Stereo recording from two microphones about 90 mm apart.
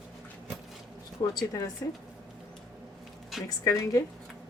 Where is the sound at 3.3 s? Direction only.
Centre (ahead or behind).